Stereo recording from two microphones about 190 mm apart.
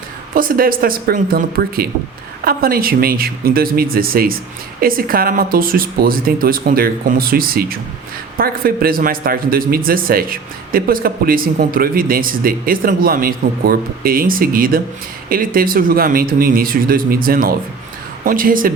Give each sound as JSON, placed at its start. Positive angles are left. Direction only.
{"t": 0.3, "sound": "a man's voice", "side_deg": -50}